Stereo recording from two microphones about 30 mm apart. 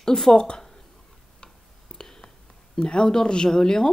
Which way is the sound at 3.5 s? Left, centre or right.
Left.